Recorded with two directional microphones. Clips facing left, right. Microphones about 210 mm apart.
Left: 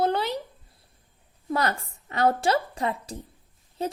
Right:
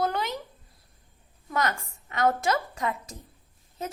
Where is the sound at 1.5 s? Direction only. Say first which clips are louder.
Left 2 dB; 35° left (ahead or behind).